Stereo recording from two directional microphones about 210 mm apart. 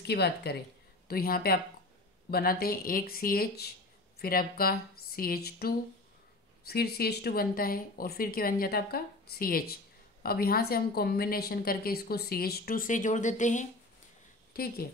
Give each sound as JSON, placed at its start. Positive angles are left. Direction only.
{"t": 0.0, "sound": "a woman's voice", "side_deg": 50}
{"t": 14.5, "sound": "speech", "side_deg": 45}